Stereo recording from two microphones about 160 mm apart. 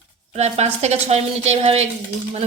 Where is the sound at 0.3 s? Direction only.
45° right (ahead or behind).